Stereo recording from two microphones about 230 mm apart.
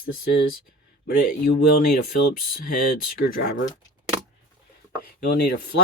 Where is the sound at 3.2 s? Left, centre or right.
Left.